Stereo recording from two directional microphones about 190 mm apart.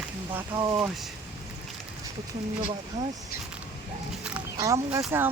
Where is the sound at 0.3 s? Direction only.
15° right (ahead or behind).